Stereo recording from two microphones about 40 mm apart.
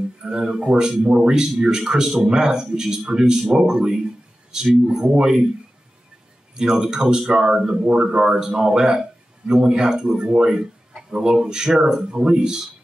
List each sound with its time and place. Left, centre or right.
0.2 s a man's voice: centre
6.5 s a man's voice: centre